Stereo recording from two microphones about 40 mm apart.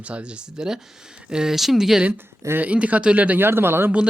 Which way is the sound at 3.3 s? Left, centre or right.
Right.